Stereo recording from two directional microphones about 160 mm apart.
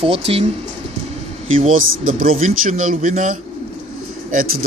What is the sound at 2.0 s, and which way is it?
Speech, 60° right (ahead or behind).